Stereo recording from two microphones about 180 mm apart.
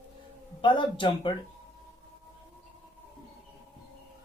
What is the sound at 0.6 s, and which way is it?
Speech, 25° left (ahead or behind).